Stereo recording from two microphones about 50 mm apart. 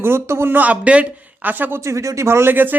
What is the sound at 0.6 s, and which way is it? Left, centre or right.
Speech, right.